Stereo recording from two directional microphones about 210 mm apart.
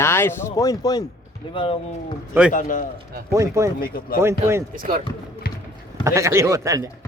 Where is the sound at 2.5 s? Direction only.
40° left (ahead or behind).